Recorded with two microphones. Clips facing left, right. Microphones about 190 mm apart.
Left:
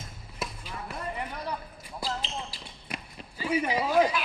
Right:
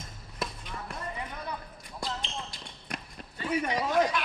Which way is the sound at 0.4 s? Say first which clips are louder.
Even; 5° left (ahead or behind).